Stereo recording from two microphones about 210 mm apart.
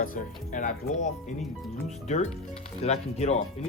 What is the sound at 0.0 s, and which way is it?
Speech, 40° left (ahead or behind).